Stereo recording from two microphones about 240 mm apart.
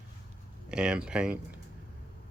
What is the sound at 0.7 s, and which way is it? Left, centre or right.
Speech, centre.